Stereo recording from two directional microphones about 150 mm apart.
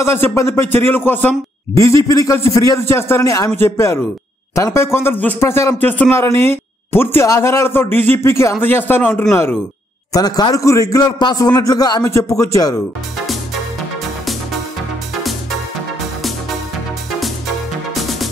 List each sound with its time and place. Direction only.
0.0 s a man's voice: 15° left (ahead or behind)
10.1 s a man's voice: 25° left (ahead or behind)